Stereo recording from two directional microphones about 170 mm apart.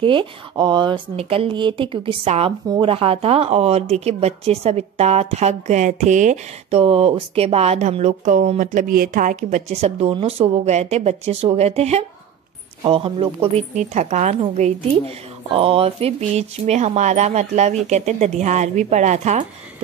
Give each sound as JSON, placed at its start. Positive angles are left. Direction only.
{"t": 0.0, "sound": "speech", "side_deg": -30}